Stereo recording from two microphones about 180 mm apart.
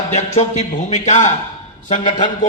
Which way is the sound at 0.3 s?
45° left (ahead or behind).